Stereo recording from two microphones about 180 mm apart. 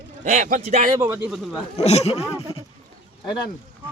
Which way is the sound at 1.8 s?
35° left (ahead or behind).